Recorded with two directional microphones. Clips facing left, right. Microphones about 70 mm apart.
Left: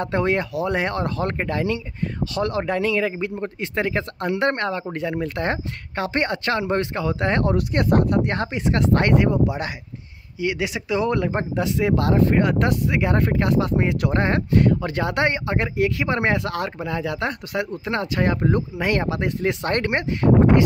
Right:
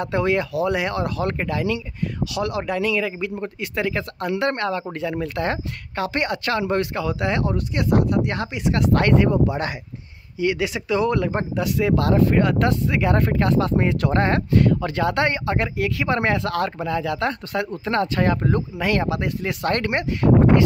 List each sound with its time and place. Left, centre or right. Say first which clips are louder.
0.0 s speech: even; left